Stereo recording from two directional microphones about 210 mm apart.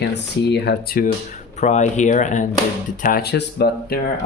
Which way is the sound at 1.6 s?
35° left (ahead or behind).